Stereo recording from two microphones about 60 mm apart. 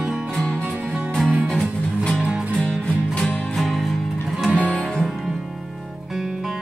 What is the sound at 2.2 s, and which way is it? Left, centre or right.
Music, centre.